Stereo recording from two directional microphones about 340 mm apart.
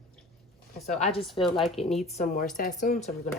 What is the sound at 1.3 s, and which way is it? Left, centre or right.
Speech, centre.